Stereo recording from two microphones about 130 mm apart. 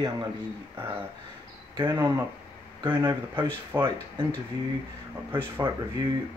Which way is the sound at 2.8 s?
30° right (ahead or behind).